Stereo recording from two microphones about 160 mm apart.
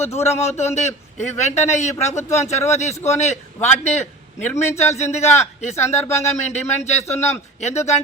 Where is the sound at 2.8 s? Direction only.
45° left (ahead or behind).